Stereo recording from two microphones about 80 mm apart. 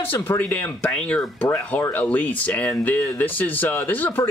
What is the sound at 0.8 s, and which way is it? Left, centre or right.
Speech, centre.